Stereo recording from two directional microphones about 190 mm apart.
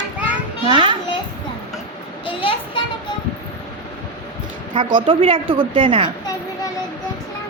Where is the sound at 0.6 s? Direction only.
25° right (ahead or behind).